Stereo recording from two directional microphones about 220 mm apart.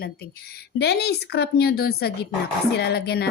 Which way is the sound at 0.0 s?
45° left (ahead or behind).